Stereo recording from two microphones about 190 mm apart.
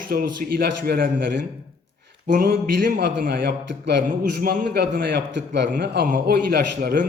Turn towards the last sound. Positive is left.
turn(degrees=-50)  # may be behind; listen again after turning